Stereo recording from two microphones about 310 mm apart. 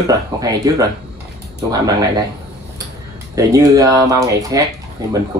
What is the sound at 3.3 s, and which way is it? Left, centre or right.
Speech, centre.